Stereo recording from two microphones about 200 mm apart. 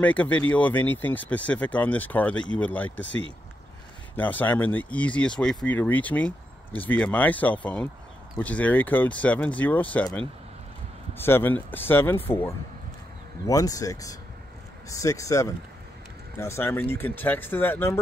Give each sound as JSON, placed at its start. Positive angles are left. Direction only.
{"t": 0.0, "sound": "speech", "side_deg": 5}
{"t": 4.2, "sound": "speech", "side_deg": 10}
{"t": 11.1, "sound": "speech", "side_deg": 10}
{"t": 13.5, "sound": "speech", "side_deg": 15}